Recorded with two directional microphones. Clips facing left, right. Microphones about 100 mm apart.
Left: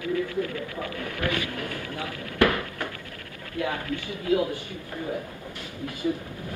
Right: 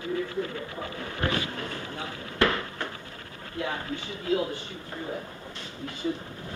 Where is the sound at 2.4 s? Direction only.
25° right (ahead or behind).